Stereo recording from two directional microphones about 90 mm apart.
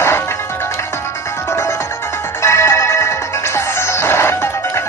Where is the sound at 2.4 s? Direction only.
30° left (ahead or behind).